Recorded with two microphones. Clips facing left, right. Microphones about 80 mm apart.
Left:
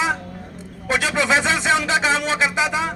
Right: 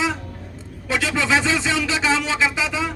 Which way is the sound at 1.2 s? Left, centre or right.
Left.